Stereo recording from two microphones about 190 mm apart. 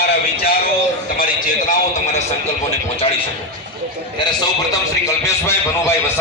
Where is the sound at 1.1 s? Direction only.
45° left (ahead or behind).